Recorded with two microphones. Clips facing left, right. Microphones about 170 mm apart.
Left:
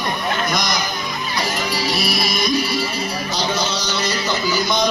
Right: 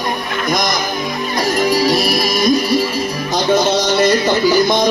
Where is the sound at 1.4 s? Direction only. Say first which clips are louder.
Right 9 dB; 45° right (ahead or behind).